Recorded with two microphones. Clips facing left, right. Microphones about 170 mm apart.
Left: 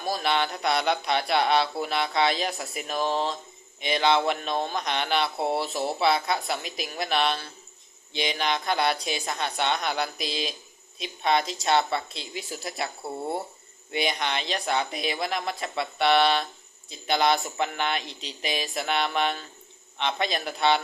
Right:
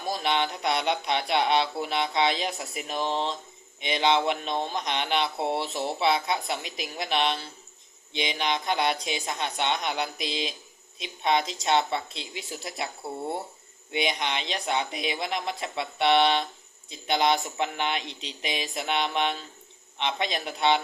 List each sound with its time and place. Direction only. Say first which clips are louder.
0.1 s speech: left 1 dB; 20° right (ahead or behind)
5.4 s speech: left 1 dB; 5° left (ahead or behind)
6.0 s speech: left 1 dB; 20° right (ahead or behind)
13.9 s speech: left 1 dB; 20° right (ahead or behind)